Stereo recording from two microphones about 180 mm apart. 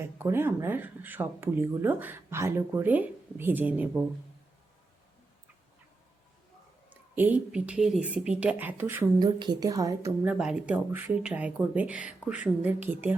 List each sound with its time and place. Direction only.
0.0 s speech: 10° right (ahead or behind)
6.9 s speech: 10° right (ahead or behind)
10.2 s speech: 5° right (ahead or behind)